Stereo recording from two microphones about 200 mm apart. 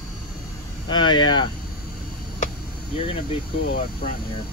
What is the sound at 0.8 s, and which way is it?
Speech, 20° left (ahead or behind).